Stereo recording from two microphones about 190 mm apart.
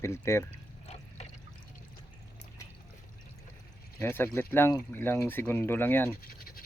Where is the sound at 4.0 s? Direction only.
10° left (ahead or behind).